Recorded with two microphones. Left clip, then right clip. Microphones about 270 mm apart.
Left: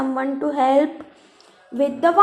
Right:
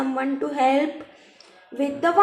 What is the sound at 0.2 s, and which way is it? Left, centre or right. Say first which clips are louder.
A woman's voice: left 2 dB; left.